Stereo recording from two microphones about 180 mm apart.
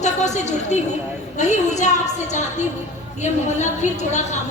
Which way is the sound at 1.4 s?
40° left (ahead or behind).